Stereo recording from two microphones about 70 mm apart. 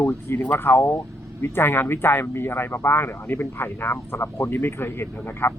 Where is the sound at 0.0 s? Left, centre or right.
Left.